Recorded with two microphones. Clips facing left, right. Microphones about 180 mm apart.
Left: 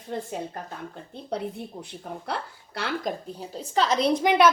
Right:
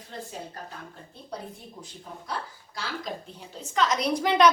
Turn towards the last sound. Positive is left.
turn(degrees=20)  # may be behind; listen again after turning